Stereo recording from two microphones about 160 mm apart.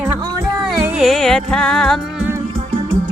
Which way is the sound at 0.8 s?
5° right (ahead or behind).